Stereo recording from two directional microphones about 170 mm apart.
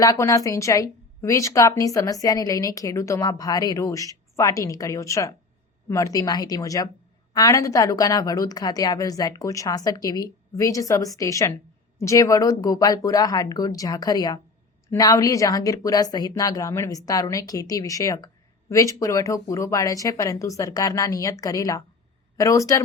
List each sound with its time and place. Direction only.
0.0 s a woman's voice: 20° left (ahead or behind)